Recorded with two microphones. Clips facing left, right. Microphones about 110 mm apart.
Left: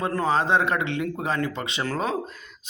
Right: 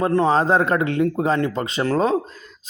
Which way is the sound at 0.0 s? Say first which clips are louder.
Right 6 dB; 30° right (ahead or behind).